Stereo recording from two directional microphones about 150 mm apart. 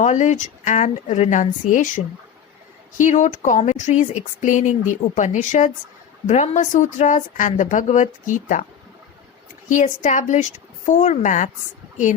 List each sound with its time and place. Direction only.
0.0 s a woman's voice: 55° left (ahead or behind)
3.0 s a woman's voice: 55° left (ahead or behind)
9.6 s a woman's voice: 55° left (ahead or behind)